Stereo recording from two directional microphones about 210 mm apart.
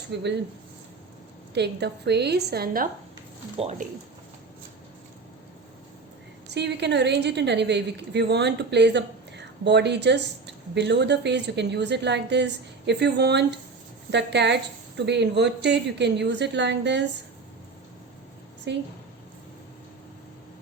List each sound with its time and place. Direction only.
0.1 s a woman's voice: 55° right (ahead or behind)
1.5 s a woman's voice: 50° right (ahead or behind)
3.6 s speech: 35° right (ahead or behind)
6.5 s a woman's voice: 55° right (ahead or behind)
18.7 s a woman's voice: 55° right (ahead or behind)